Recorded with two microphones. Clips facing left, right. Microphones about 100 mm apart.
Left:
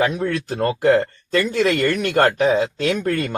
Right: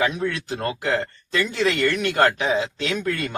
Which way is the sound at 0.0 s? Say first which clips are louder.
Left 3 dB; 45° left (ahead or behind).